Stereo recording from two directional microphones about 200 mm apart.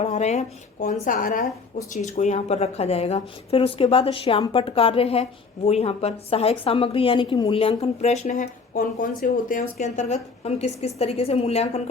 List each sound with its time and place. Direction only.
0.0 s a woman's voice: 35° left (ahead or behind)